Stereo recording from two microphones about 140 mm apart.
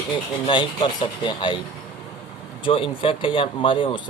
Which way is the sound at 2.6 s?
40° left (ahead or behind).